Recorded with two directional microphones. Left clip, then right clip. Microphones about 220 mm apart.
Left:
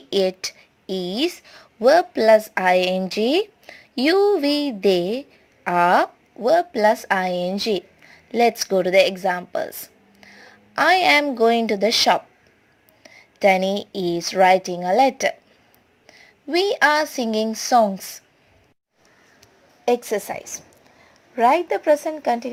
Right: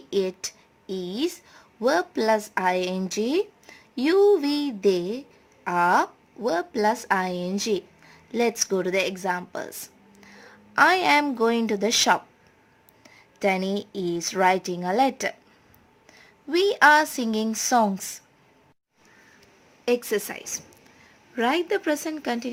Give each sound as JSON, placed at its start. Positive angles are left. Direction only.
{"t": 0.1, "sound": "speech", "side_deg": 15}
{"t": 10.2, "sound": "a sound", "side_deg": 5}
{"t": 11.3, "sound": "a woman's voice", "side_deg": 0}
{"t": 19.8, "sound": "a woman's voice", "side_deg": 0}
{"t": 22.0, "sound": "a woman's voice", "side_deg": -10}